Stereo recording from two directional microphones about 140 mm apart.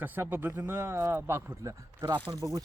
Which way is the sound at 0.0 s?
15° right (ahead or behind).